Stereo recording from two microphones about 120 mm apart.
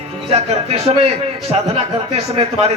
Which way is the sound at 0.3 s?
60° right (ahead or behind).